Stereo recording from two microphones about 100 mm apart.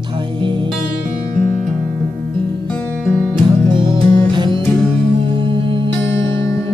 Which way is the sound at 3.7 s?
55° right (ahead or behind).